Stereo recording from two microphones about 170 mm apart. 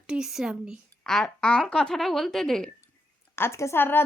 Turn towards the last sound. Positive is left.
turn(degrees=10)  # may be behind; listen again after turning